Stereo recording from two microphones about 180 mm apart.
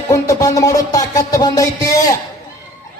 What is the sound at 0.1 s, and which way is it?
A man's voice, 20° left (ahead or behind).